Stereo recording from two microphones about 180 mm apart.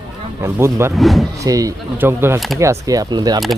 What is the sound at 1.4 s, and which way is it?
Speech, 20° right (ahead or behind).